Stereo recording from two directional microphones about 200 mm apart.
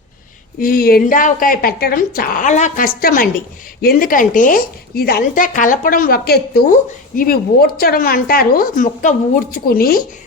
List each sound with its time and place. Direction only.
0.6 s speech: 45° left (ahead or behind)